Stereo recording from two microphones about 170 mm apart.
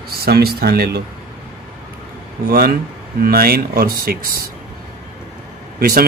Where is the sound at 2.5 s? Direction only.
65° right (ahead or behind).